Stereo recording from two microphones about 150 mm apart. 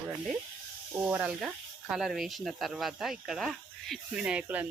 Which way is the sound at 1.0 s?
10° right (ahead or behind).